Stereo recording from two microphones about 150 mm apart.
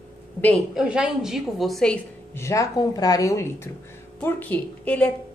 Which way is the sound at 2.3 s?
20° left (ahead or behind).